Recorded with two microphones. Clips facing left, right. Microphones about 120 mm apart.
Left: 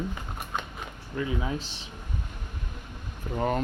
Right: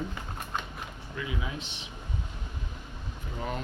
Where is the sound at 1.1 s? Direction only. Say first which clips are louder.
Left 6 dB; 40° left (ahead or behind).